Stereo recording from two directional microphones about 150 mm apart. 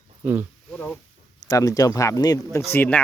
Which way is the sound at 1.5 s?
20° left (ahead or behind).